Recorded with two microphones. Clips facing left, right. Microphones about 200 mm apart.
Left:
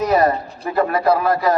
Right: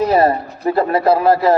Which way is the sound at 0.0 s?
30° right (ahead or behind).